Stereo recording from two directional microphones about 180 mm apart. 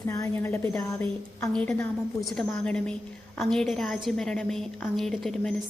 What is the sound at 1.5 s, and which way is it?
A woman's voice, 5° left (ahead or behind).